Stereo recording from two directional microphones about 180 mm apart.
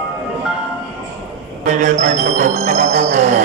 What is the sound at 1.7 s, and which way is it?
Music, 45° right (ahead or behind).